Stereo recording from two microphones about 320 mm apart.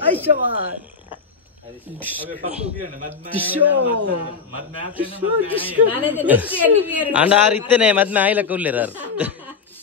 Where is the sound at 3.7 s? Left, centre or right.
Right.